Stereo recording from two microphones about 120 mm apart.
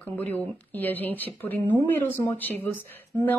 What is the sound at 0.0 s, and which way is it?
A woman's voice, 15° left (ahead or behind).